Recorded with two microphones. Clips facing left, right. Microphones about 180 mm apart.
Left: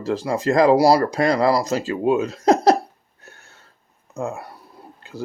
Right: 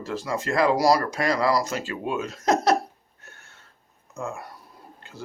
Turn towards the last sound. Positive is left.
turn(degrees=35)  # may be behind; listen again after turning